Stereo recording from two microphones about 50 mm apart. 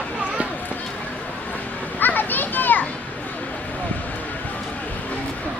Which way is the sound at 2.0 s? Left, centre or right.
Left.